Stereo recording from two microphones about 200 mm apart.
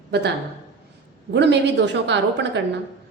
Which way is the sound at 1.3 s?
60° right (ahead or behind).